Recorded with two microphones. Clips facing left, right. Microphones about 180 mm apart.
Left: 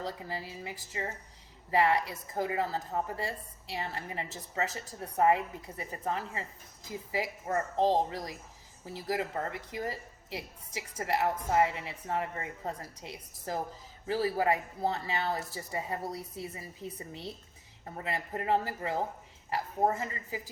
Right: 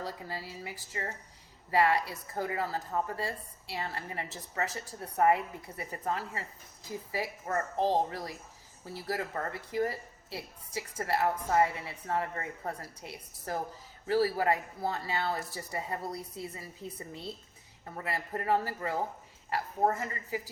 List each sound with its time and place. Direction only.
0.0 s a woman's voice: 20° left (ahead or behind)
19.8 s speech: 10° left (ahead or behind)